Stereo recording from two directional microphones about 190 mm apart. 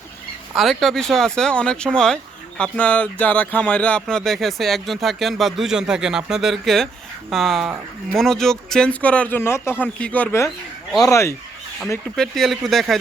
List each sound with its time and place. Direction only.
0.5 s speech: centre (ahead or behind); by 11.3 s 15° left (ahead or behind)
12.1 s speech: centre (ahead or behind)